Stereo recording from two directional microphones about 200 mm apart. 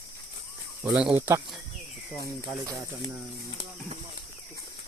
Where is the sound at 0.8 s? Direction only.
5° right (ahead or behind).